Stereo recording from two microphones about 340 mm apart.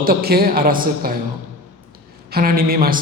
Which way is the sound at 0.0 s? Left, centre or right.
Right.